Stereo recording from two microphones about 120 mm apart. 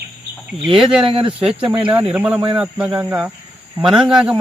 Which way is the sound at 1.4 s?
10° right (ahead or behind).